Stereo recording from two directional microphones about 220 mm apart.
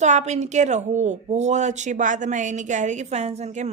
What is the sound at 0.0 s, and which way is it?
Speech, 30° right (ahead or behind).